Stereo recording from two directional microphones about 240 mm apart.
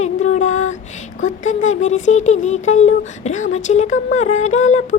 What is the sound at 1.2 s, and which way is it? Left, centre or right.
Speech, left.